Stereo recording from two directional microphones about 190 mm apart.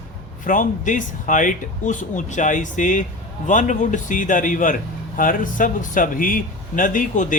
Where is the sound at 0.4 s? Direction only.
45° left (ahead or behind).